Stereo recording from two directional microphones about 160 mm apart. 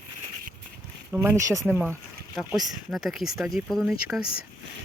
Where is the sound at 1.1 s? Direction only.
15° right (ahead or behind).